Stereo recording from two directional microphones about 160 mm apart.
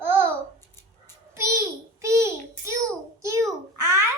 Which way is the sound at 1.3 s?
15° right (ahead or behind).